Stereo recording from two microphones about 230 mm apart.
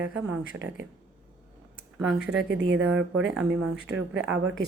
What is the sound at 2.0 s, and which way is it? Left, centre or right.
Speech, centre.